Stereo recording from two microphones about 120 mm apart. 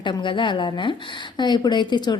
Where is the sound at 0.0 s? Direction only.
40° left (ahead or behind).